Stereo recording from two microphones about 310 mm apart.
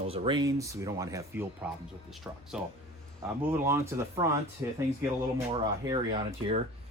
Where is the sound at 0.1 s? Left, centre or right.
Centre.